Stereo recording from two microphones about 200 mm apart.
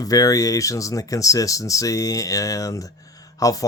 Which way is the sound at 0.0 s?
15° left (ahead or behind).